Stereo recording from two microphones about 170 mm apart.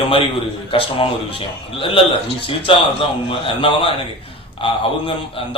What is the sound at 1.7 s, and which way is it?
A man's voice, 30° left (ahead or behind).